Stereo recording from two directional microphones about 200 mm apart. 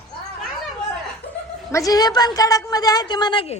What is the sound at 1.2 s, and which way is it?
Chuckle, 30° left (ahead or behind).